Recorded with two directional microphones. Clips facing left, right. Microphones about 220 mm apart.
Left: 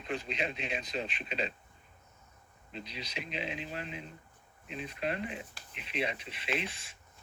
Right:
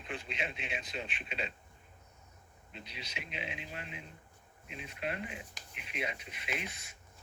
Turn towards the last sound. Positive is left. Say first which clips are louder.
# left 5 dB
turn(degrees=30)  # may be behind; listen again after turning